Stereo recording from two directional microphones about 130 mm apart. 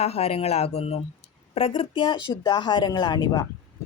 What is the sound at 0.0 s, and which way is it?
A woman's voice, 50° left (ahead or behind).